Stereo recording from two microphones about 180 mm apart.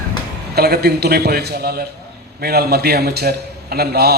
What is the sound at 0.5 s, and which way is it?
A man's voice, 60° right (ahead or behind).